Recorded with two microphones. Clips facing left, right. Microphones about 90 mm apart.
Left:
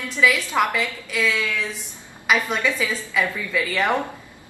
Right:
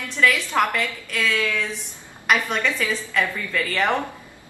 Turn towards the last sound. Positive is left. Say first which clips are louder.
# left 1 dB
turn(degrees=5)  # may be behind; listen again after turning